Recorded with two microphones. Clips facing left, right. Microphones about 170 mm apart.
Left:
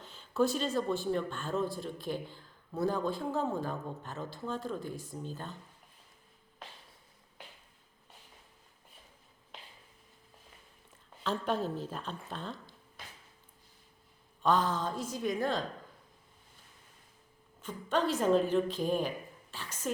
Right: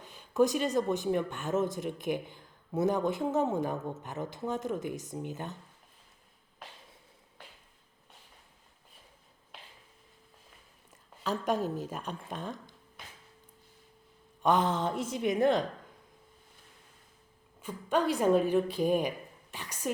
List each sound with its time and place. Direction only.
0.0 s speech: 15° right (ahead or behind)
11.2 s a woman's voice: 10° right (ahead or behind)
14.4 s speech: 20° right (ahead or behind)
17.6 s a woman's voice: 10° right (ahead or behind)